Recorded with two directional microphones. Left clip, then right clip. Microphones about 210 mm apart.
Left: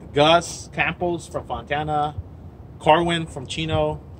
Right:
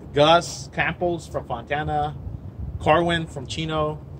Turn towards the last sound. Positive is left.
turn(degrees=10)  # may be behind; listen again after turning